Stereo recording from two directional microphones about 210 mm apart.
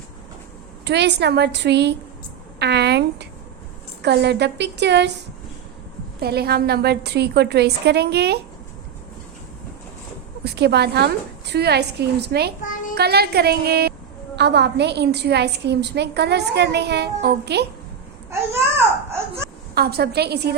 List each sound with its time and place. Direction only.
0.9 s a woman's voice: 55° right (ahead or behind)
6.1 s a woman's voice: 50° right (ahead or behind)
10.4 s a woman's voice: 50° right (ahead or behind)
12.6 s a sound: 40° left (ahead or behind)
13.0 s a woman's voice: 50° right (ahead or behind)
19.7 s a woman's voice: 50° right (ahead or behind)